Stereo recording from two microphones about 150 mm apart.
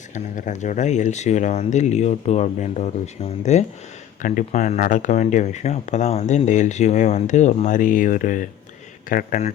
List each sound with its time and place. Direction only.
0.1 s speech: 55° left (ahead or behind)
4.2 s speech: 60° left (ahead or behind)